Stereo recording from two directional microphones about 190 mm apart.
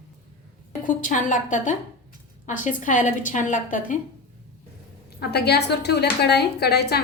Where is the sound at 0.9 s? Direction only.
45° left (ahead or behind).